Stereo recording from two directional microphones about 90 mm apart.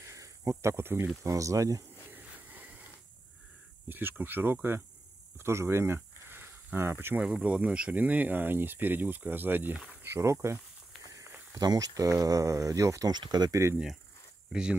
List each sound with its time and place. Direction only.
0.0 s cricket: 35° right (ahead or behind)
1.2 s speech: 35° right (ahead or behind)
2.1 s a sound: 20° right (ahead or behind)
3.9 s speech: 20° right (ahead or behind)
7.2 s speech: 10° right (ahead or behind); by 10.6 s 30° right (ahead or behind)
11.5 s speech: 45° right (ahead or behind)
13.1 s speech: 50° right (ahead or behind)
14.5 s speech: 10° right (ahead or behind)